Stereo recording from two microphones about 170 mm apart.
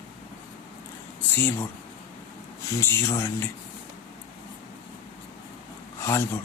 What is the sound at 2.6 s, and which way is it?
Speech, 15° left (ahead or behind).